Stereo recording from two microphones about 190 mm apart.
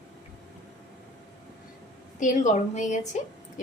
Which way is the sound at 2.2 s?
40° left (ahead or behind).